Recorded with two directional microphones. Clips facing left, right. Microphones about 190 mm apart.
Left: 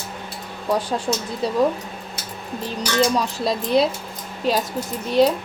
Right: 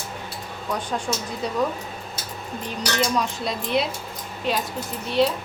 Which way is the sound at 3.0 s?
35° left (ahead or behind).